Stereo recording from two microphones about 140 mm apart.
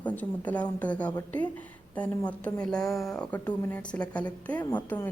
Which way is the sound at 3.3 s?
15° left (ahead or behind).